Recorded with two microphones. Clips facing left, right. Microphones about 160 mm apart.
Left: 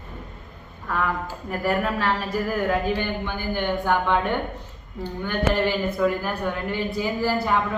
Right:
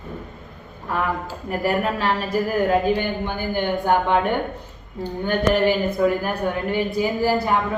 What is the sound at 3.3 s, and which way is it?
Speech, 15° right (ahead or behind).